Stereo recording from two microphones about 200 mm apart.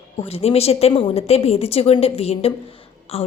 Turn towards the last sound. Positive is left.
turn(degrees=30)  # may be behind; listen again after turning